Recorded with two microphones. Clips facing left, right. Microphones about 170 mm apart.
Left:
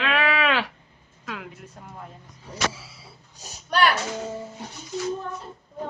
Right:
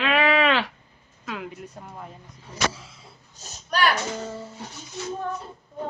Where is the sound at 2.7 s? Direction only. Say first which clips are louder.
Even; 5° left (ahead or behind).